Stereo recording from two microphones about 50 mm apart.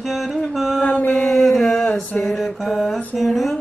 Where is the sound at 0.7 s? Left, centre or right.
Left.